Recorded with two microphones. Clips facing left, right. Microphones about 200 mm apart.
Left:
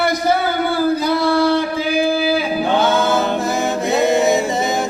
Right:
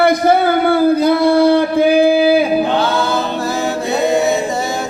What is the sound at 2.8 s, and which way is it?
A capella, 20° left (ahead or behind).